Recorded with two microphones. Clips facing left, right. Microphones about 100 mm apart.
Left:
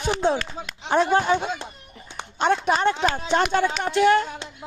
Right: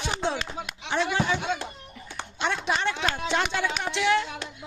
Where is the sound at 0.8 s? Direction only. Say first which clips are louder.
Left 7 dB; 45° left (ahead or behind).